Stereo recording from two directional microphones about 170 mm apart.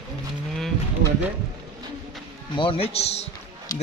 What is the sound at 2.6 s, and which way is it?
Speech, 35° left (ahead or behind).